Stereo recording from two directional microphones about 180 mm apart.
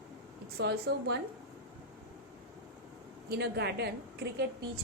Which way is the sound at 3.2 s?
65° right (ahead or behind).